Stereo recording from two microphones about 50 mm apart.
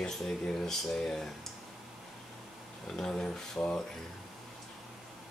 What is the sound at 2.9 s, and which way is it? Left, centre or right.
Speech, centre.